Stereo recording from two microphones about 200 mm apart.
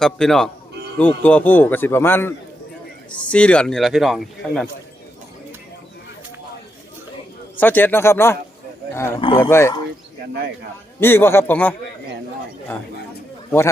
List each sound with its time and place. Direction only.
0.0 s speech: centre (ahead or behind)
7.5 s speech: 10° left (ahead or behind)
11.0 s speech: 10° left (ahead or behind)